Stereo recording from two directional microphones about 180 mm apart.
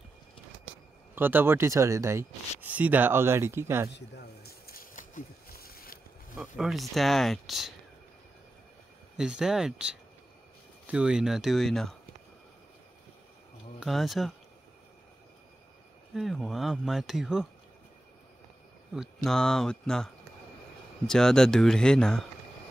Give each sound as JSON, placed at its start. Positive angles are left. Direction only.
{"t": 1.1, "sound": "speech", "side_deg": -10}
{"t": 3.9, "sound": "a sound", "side_deg": 65}
{"t": 6.3, "sound": "speech", "side_deg": -5}
{"t": 9.1, "sound": "speech", "side_deg": -5}
{"t": 13.7, "sound": "speech", "side_deg": 0}
{"t": 16.2, "sound": "speech", "side_deg": 0}
{"t": 18.9, "sound": "speech", "side_deg": 0}
{"t": 21.1, "sound": "speech", "side_deg": 5}